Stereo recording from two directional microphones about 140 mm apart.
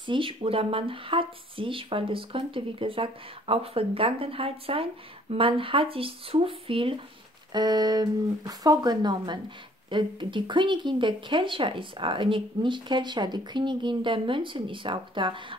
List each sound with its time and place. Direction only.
0.0 s speech: 40° right (ahead or behind)
7.5 s speech: 30° right (ahead or behind)